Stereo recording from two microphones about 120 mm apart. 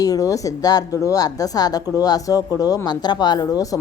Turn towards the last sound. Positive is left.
turn(degrees=30)  # may be behind; listen again after turning